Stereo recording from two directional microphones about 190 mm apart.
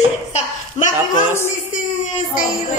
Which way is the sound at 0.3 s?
40° left (ahead or behind).